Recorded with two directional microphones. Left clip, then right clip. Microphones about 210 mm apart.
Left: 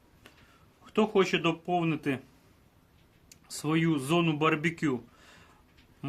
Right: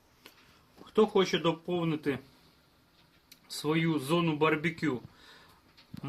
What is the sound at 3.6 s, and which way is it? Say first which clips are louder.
Speech: left 1 dB; 50° left (ahead or behind).